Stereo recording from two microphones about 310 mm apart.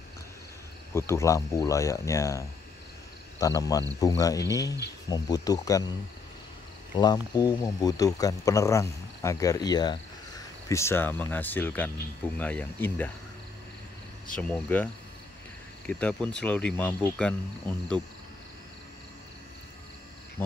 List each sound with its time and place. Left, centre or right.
0.9 s speech: centre
7.0 s speech: centre
14.3 s speech: centre
15.9 s speech: centre
20.4 s speech: centre